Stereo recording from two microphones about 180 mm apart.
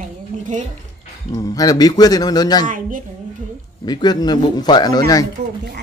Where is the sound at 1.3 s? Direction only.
20° left (ahead or behind).